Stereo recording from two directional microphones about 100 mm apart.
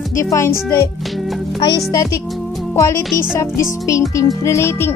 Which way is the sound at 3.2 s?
30° left (ahead or behind).